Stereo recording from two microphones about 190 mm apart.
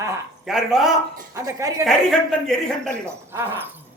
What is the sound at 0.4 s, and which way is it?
Speech, centre (ahead or behind).